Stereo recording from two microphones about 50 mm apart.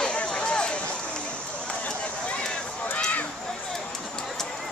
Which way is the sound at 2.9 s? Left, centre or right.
Left.